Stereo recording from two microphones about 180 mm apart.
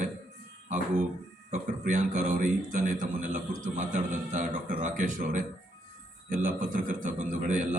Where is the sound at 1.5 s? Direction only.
45° right (ahead or behind).